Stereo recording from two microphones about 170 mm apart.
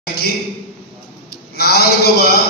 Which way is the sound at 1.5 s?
65° left (ahead or behind).